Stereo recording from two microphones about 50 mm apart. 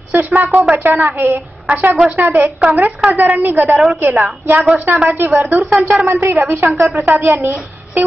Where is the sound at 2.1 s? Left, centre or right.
Right.